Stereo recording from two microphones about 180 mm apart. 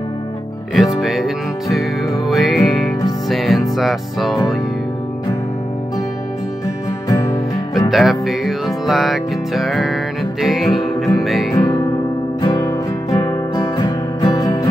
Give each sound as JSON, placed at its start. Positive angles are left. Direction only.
{"t": 0.7, "sound": "music", "side_deg": 0}
{"t": 7.1, "sound": "music", "side_deg": 20}
{"t": 7.9, "sound": "music", "side_deg": 0}
{"t": 11.5, "sound": "music", "side_deg": 20}